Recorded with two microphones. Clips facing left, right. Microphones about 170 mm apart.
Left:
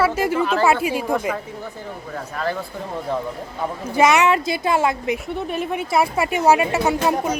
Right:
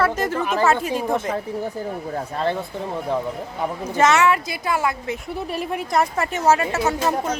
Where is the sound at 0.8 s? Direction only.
10° left (ahead or behind).